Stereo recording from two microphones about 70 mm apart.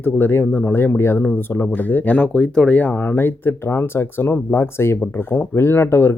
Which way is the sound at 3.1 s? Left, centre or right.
Left.